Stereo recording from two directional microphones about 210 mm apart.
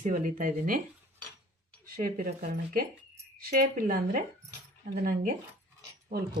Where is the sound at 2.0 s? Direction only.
40° right (ahead or behind).